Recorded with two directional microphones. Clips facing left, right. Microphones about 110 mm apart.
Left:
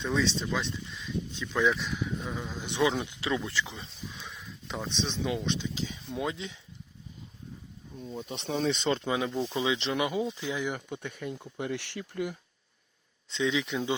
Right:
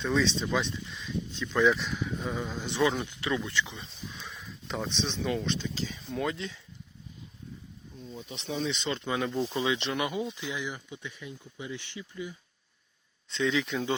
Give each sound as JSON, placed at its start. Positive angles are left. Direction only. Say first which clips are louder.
{"t": 0.0, "sound": "speech", "louder": "right 1 dB", "side_deg": 5}
{"t": 2.6, "sound": "speech", "louder": "even", "side_deg": 15}
{"t": 3.2, "sound": "speech", "louder": "even", "side_deg": 25}
{"t": 4.1, "sound": "a sound", "louder": "even", "side_deg": 0}
{"t": 5.2, "sound": "speech", "louder": "right 1 dB", "side_deg": 15}
{"t": 8.1, "sound": "speech", "louder": "left 3 dB", "side_deg": 40}
{"t": 9.0, "sound": "speech", "louder": "even", "side_deg": 20}
{"t": 9.7, "sound": "speech", "louder": "left 2 dB", "side_deg": 25}
{"t": 10.6, "sound": "speech", "louder": "left 4 dB", "side_deg": 55}
{"t": 13.3, "sound": "speech", "louder": "even", "side_deg": 10}